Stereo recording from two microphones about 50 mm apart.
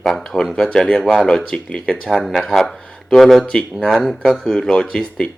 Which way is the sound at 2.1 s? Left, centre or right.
Centre.